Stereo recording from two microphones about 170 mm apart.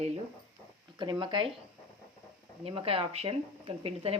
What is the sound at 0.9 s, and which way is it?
Speech, 25° right (ahead or behind).